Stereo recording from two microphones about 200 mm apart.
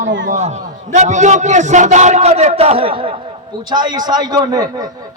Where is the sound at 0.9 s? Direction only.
35° right (ahead or behind).